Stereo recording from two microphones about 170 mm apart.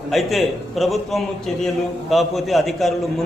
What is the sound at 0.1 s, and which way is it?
A man's voice, centre (ahead or behind).